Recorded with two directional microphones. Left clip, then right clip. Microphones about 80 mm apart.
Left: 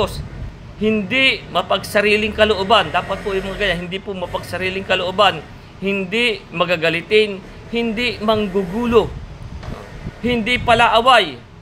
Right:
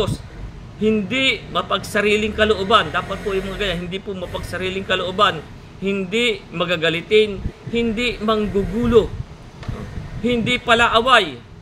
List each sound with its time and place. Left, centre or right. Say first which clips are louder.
0.7 s a man's voice: left 2 dB; right
4.1 s a man's voice: left 5 dB; right
4.5 s a man's voice: left 2 dB; right
10.5 s a man's voice: left 2 dB; right